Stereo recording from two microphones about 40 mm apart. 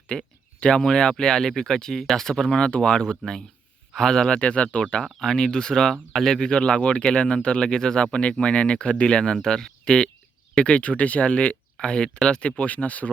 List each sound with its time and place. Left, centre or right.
0.1 s speech: centre
4.3 s speech: left
5.0 s speech: centre; by 13.1 s left